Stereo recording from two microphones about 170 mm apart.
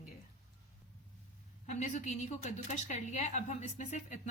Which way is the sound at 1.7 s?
45° left (ahead or behind).